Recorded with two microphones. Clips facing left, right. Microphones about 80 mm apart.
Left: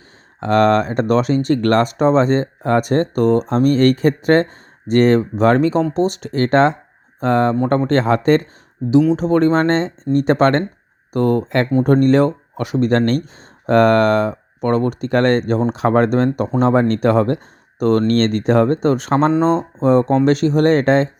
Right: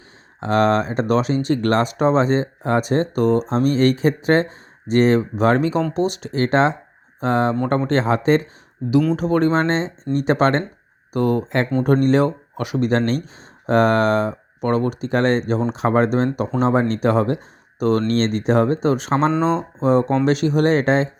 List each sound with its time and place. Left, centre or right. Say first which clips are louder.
0.3 s speech: left 3 dB; left
2.0 s speech: left 3 dB; left
9.1 s speech: left 3 dB; left
13.0 s speech: left 4 dB; left